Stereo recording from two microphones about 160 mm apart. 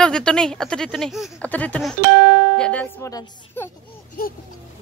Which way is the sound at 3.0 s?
20° left (ahead or behind).